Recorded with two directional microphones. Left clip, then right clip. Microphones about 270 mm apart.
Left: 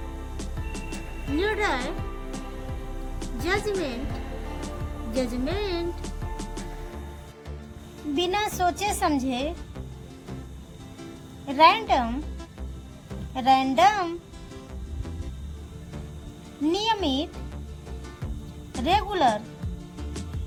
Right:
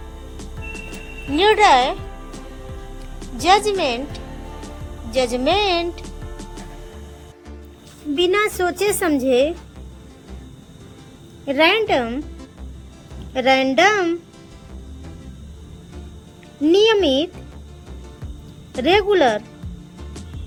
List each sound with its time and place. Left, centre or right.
0.3 s music: centre
3.2 s speech: centre
5.1 s music: centre
8.1 s a woman's voice: centre
11.4 s a woman's voice: centre
13.4 s a woman's voice: centre
16.6 s a woman's voice: centre
18.7 s a woman's voice: centre